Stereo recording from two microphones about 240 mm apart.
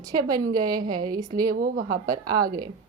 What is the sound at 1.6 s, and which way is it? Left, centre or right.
Speech, right.